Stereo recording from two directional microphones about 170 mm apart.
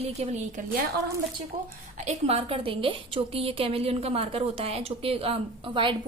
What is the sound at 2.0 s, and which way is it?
A woman's voice, 35° right (ahead or behind).